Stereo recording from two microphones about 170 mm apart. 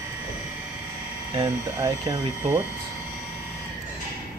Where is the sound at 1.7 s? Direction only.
20° right (ahead or behind).